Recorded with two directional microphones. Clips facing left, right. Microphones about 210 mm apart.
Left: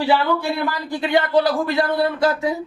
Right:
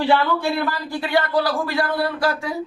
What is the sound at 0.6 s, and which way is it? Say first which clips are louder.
Speech: left 1 dB; 20° left (ahead or behind).